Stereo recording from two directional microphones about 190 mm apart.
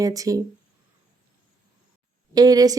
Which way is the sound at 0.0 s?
15° right (ahead or behind).